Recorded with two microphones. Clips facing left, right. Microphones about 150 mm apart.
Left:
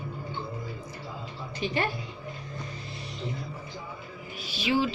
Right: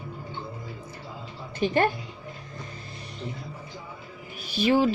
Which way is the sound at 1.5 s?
50° right (ahead or behind).